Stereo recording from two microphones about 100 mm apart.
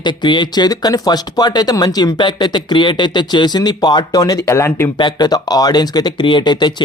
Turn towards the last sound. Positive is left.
turn(degrees=50)  # may be behind; listen again after turning